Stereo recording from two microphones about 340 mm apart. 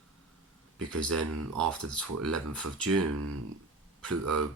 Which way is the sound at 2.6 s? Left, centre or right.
Right.